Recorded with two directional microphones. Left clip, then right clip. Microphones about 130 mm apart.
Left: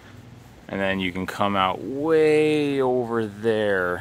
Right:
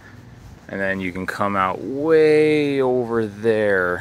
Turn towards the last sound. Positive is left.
turn(degrees=-15)  # may be behind; listen again after turning